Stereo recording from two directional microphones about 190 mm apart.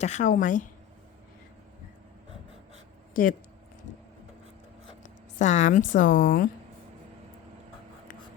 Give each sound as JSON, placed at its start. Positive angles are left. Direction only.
{"t": 0.0, "sound": "a woman's voice", "side_deg": 40}
{"t": 5.0, "sound": "speech", "side_deg": 40}